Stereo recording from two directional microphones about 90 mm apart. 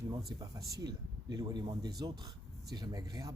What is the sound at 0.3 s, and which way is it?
Speech, 40° right (ahead or behind).